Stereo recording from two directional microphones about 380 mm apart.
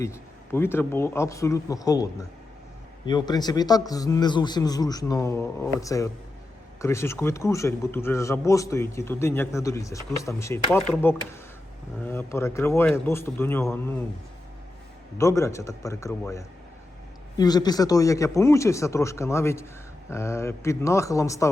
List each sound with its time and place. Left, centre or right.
0.0 s a man's voice: centre
3.1 s a man's voice: centre
15.2 s a man's voice: centre